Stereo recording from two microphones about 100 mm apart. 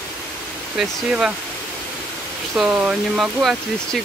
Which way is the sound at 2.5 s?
10° right (ahead or behind).